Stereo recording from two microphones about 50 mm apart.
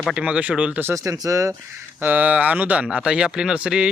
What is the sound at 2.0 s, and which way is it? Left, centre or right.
Speech, right.